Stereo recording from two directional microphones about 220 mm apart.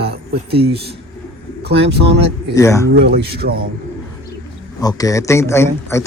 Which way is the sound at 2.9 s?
45° right (ahead or behind).